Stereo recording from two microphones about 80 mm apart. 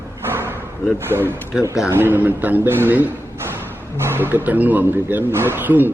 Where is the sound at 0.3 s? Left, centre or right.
Right.